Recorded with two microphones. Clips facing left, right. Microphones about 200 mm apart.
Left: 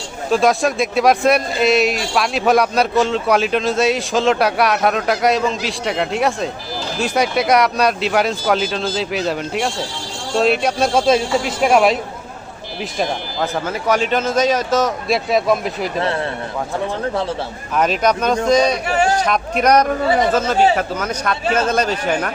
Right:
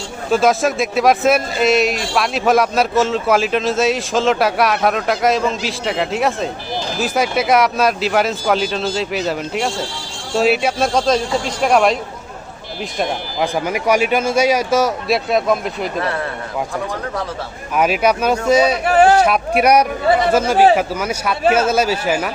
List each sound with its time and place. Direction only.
0.3 s a man's voice: centre (ahead or behind)
13.4 s a man's voice: 15° right (ahead or behind)
17.7 s a man's voice: 10° right (ahead or behind)
18.9 s speech: 55° right (ahead or behind)
19.2 s a man's voice: 10° right (ahead or behind)